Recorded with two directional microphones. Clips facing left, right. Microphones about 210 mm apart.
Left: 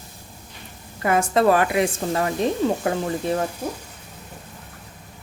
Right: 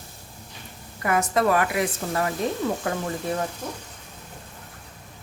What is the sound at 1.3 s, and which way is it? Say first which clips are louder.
Speech: left 5 dB; 30° left (ahead or behind).